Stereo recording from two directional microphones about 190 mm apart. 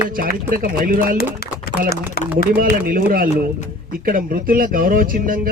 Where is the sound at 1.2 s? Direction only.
55° left (ahead or behind).